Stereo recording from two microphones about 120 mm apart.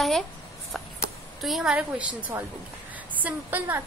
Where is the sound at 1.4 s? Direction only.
Centre (ahead or behind).